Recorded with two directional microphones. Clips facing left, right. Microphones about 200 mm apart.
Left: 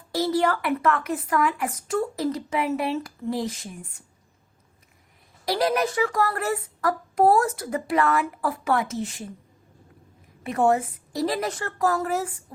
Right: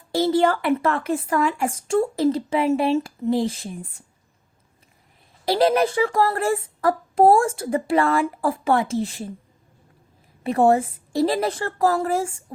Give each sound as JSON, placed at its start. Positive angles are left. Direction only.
{"t": 0.1, "sound": "speech", "side_deg": -25}
{"t": 5.5, "sound": "speech", "side_deg": -25}
{"t": 10.4, "sound": "a woman's voice", "side_deg": -30}